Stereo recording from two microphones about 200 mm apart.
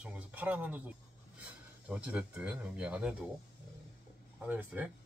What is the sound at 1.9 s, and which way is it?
Speech, 5° right (ahead or behind).